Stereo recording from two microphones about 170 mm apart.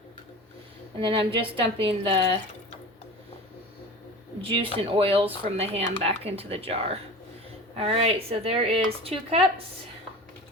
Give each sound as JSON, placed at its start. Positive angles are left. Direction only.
{"t": 0.9, "sound": "a woman's voice", "side_deg": -30}
{"t": 4.4, "sound": "a woman's voice", "side_deg": -30}